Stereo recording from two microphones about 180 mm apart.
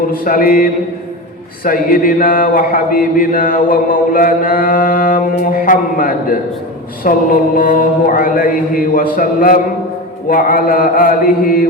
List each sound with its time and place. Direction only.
0.1 s mantra: 50° left (ahead or behind)